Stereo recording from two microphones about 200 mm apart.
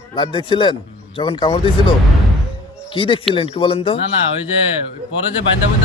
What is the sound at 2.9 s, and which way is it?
Speech, 25° left (ahead or behind).